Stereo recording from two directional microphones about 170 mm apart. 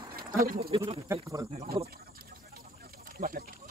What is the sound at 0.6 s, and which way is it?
Speech, 30° right (ahead or behind).